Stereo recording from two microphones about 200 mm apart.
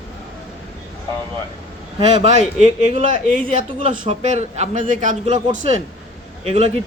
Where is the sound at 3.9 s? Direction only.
35° right (ahead or behind).